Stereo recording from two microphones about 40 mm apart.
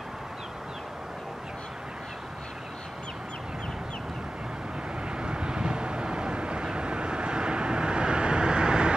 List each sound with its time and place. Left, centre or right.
5.1 s vehicle: right